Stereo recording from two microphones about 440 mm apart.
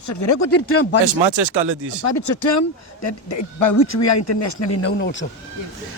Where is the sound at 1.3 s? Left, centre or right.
Right.